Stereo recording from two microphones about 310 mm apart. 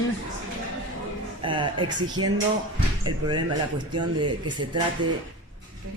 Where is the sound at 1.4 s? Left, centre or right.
Centre.